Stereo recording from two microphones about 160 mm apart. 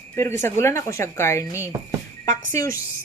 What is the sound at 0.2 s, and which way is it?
Speech, 15° left (ahead or behind).